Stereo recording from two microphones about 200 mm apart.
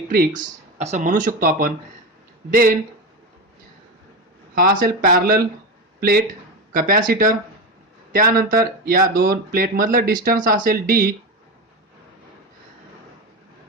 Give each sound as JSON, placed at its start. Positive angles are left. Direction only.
{"t": 0.1, "sound": "speech", "side_deg": -45}
{"t": 4.5, "sound": "speech", "side_deg": -45}